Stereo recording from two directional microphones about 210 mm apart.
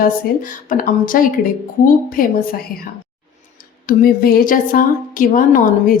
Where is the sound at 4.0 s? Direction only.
45° left (ahead or behind).